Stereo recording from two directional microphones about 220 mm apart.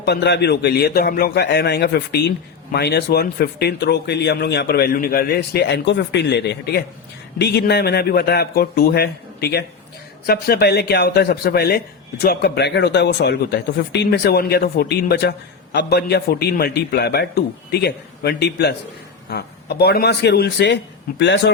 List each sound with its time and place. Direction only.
0.0 s speech: 50° left (ahead or behind)